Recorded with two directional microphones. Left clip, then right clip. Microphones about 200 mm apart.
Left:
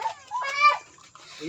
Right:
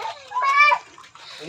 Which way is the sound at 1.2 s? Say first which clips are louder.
Right 1 dB; 35° left (ahead or behind).